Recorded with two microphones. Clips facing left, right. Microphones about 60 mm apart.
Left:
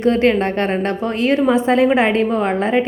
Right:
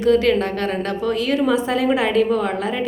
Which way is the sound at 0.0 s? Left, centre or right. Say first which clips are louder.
Left 1 dB; left.